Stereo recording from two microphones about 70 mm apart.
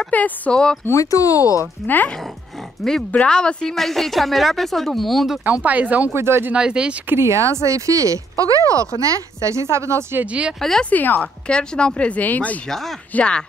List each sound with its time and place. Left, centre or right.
0.0 s speech: centre
0.8 s speech: left
3.1 s a woman's voice: centre
5.4 s speech: right
6.1 s speech: right
6.5 s speech: centre
7.1 s speech: right
10.1 s speech: centre
10.6 s speech: centre
10.9 s a woman's voice: left
12.6 s a woman's voice: centre